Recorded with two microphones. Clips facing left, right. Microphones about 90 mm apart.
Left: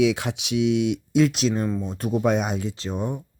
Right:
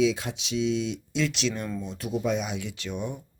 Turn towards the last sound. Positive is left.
turn(degrees=35)  # may be behind; listen again after turning